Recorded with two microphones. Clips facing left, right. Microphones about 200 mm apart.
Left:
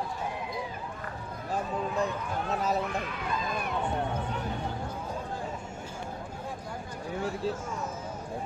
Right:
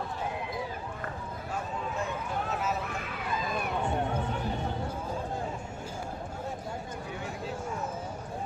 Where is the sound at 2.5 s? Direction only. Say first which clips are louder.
Left 5 dB; 35° left (ahead or behind).